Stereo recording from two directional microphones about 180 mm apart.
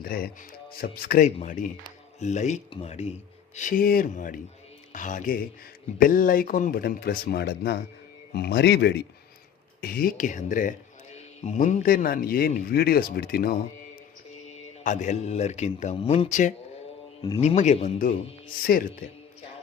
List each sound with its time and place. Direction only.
0.0 s a man's voice: 60° left (ahead or behind)
9.8 s speech: 55° left (ahead or behind)
14.8 s speech: 40° left (ahead or behind)
18.6 s a man's voice: 55° left (ahead or behind)